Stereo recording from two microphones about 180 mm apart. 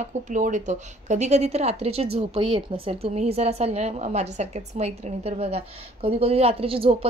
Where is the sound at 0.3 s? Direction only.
45° right (ahead or behind).